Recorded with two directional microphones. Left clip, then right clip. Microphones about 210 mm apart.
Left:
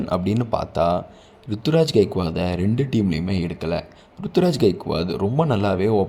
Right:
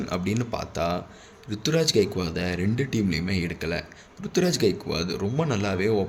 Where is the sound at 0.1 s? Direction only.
25° left (ahead or behind).